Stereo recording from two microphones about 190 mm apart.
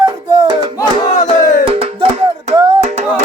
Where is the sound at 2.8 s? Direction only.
35° right (ahead or behind).